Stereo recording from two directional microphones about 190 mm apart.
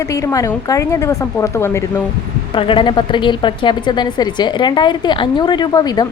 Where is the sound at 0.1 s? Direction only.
15° left (ahead or behind).